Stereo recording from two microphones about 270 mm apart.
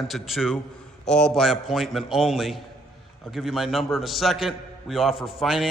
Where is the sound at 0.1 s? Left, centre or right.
Centre.